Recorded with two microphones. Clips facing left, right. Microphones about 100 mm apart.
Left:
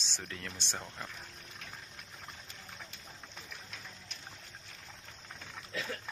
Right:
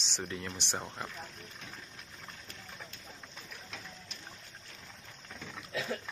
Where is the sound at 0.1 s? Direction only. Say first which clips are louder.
Right 6 dB; 15° right (ahead or behind).